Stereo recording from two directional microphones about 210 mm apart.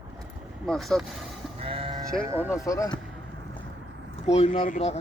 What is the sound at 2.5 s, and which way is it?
Speech, 15° left (ahead or behind).